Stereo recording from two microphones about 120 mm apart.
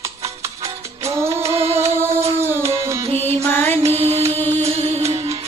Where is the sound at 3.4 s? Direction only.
15° left (ahead or behind).